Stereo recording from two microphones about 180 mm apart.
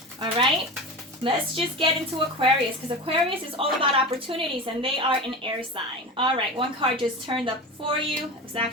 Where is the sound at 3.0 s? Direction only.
30° right (ahead or behind).